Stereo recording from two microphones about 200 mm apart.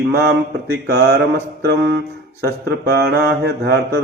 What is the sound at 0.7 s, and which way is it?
Mantra, 55° right (ahead or behind).